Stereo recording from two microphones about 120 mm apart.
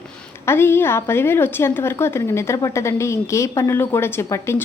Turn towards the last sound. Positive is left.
turn(degrees=20)  # may be behind; listen again after turning